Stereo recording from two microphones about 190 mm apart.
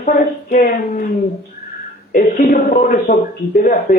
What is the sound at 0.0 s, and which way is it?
Speech, 40° left (ahead or behind).